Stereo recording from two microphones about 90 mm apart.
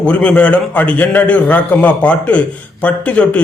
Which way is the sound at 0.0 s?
15° left (ahead or behind).